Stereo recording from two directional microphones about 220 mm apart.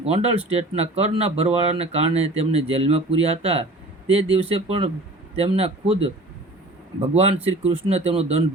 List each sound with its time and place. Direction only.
0.0 s speech: 25° right (ahead or behind)
7.1 s speech: 30° right (ahead or behind)